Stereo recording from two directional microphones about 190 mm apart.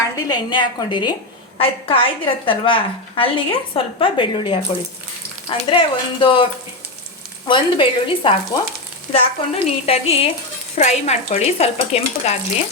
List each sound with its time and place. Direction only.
0.3 s a woman's voice: 25° left (ahead or behind)